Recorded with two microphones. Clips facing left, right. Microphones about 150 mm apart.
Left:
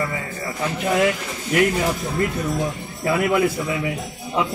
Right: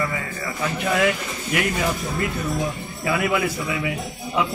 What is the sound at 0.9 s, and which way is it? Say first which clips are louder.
Speech: left 2 dB; 30° left (ahead or behind).